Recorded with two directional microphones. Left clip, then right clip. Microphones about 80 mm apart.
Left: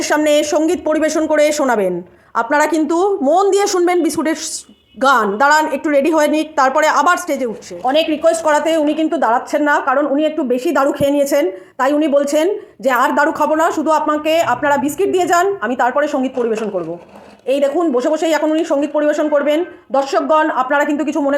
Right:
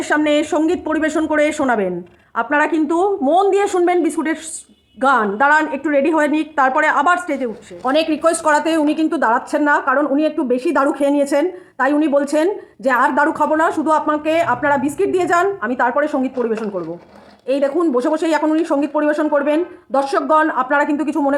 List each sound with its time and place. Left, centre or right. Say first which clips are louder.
0.2 s a woman's voice: left 4 dB; centre
0.7 s a woman's voice: left 3 dB; centre
1.3 s a woman's voice: left 3 dB; left
7.9 s a woman's voice: left 2 dB; centre